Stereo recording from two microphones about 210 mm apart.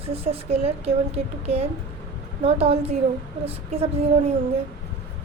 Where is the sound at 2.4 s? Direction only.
30° right (ahead or behind).